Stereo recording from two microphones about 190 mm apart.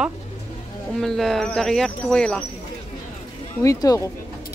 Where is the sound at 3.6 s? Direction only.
20° left (ahead or behind).